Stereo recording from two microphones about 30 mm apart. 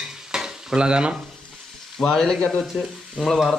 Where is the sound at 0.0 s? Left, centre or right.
Right.